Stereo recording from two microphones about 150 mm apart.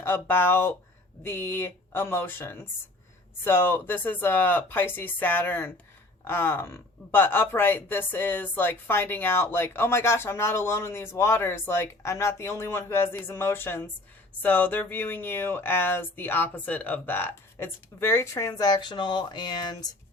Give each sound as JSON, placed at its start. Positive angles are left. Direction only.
{"t": 0.0, "sound": "a woman's voice", "side_deg": 15}